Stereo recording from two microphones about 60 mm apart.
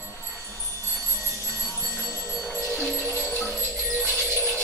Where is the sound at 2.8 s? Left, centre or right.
Centre.